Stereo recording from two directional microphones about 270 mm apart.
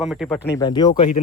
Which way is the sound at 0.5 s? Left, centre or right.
Centre.